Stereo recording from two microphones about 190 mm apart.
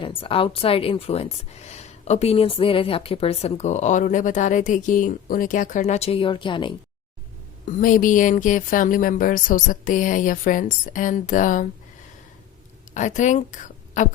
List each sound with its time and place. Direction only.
0.0 s a woman's voice: 30° left (ahead or behind)
7.6 s speech: 45° left (ahead or behind)
12.9 s a woman's voice: 40° left (ahead or behind)